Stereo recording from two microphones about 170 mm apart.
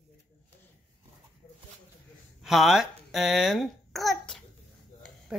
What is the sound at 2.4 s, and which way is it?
A child's voice, centre (ahead or behind).